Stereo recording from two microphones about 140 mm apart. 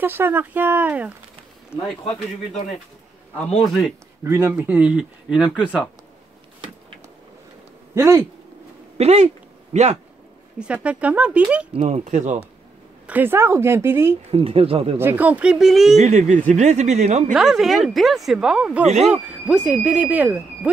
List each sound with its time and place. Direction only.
0.0 s speech: 15° right (ahead or behind)
1.7 s speech: 15° left (ahead or behind)
4.2 s speech: 20° right (ahead or behind)
7.9 s speech: 20° right (ahead or behind)
8.9 s speech: 55° right (ahead or behind)
10.6 s speech: 10° right (ahead or behind)
11.8 s speech: 60° right (ahead or behind)
13.0 s speech: 15° right (ahead or behind)
14.3 s speech: 40° right (ahead or behind)
15.0 s speech: 15° right (ahead or behind)
16.0 s speech: 55° right (ahead or behind)
17.3 s speech: 5° right (ahead or behind)